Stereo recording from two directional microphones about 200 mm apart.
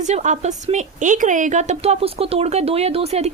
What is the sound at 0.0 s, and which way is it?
A woman's voice, 35° right (ahead or behind).